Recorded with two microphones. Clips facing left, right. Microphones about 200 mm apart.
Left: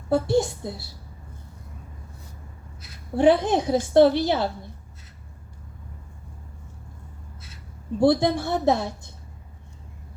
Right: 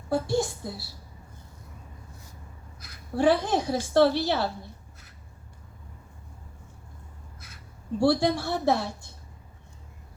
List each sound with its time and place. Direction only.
0.1 s a woman's voice: 20° left (ahead or behind)
2.8 s a woman's voice: 20° left (ahead or behind)
7.9 s a woman's voice: 20° left (ahead or behind)